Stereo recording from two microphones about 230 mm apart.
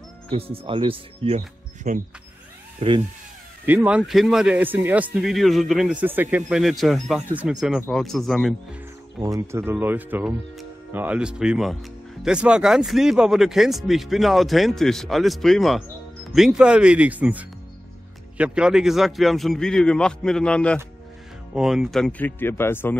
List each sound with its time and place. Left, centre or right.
0.3 s speech: right
3.6 s speech: centre
9.2 s speech: centre